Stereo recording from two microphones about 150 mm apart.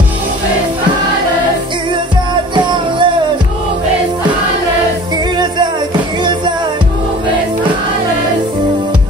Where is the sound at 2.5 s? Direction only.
30° right (ahead or behind).